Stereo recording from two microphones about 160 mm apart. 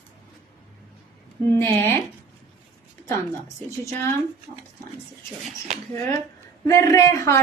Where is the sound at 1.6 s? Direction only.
15° left (ahead or behind).